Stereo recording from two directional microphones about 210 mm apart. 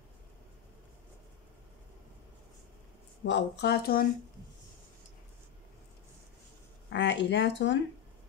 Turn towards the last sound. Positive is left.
turn(degrees=55)  # may be behind; listen again after turning